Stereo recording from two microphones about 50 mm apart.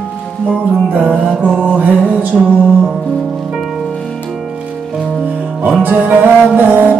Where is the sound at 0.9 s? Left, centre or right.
Right.